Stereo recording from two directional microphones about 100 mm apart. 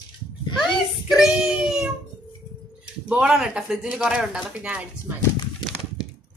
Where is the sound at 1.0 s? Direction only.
5° right (ahead or behind).